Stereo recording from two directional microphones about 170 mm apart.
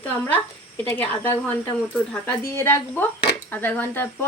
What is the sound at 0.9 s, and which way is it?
Speech, 10° left (ahead or behind).